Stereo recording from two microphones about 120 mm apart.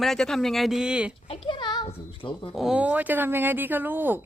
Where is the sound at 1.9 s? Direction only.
50° left (ahead or behind).